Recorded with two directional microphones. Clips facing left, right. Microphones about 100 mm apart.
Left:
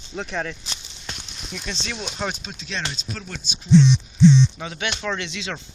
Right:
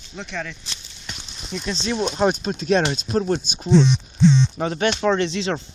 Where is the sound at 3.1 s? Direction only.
35° right (ahead or behind).